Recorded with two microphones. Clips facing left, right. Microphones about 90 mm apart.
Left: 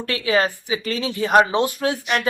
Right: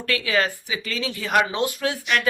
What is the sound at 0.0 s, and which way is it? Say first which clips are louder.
A woman's voice: left 3 dB; 30° left (ahead or behind).